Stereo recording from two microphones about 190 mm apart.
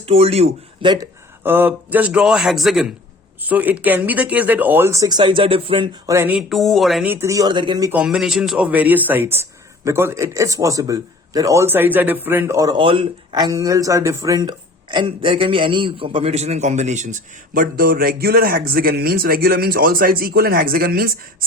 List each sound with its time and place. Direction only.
0.0 s speech: 30° right (ahead or behind)
1.5 s speech: 10° right (ahead or behind); by 6.1 s 25° right (ahead or behind)
6.1 s speech: 10° right (ahead or behind)
7.9 s speech: 5° right (ahead or behind); by 21.2 s 50° right (ahead or behind)